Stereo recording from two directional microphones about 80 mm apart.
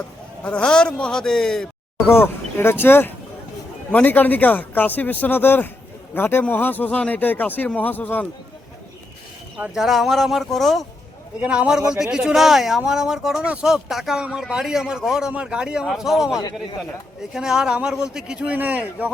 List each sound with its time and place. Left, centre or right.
0.4 s a man's voice: centre
2.0 s speech: left
9.7 s speech: centre
11.3 s speech: centre